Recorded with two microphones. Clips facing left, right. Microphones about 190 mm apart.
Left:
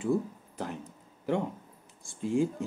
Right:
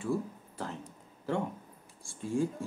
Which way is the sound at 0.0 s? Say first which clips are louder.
Left 4 dB; 20° left (ahead or behind).